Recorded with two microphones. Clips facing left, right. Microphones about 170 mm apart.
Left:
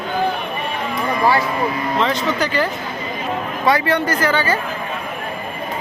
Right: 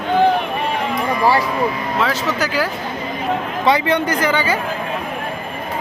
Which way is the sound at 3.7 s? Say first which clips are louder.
Right 1 dB; 20° right (ahead or behind).